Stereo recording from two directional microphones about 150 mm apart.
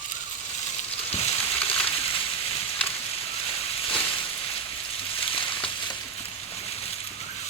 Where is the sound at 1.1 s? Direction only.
40° left (ahead or behind).